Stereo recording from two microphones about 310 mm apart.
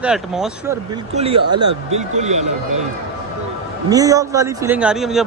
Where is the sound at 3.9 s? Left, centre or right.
Centre.